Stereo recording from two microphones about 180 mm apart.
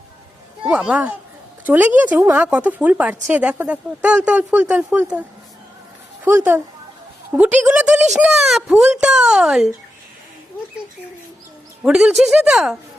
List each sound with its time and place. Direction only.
0.7 s speech: 5° right (ahead or behind)
6.3 s speech: 15° right (ahead or behind)
11.8 s speech: 5° right (ahead or behind)